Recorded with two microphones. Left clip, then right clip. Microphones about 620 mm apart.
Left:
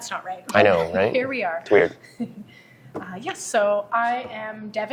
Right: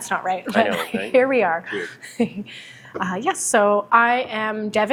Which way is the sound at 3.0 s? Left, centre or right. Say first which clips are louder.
Right 10 dB; right.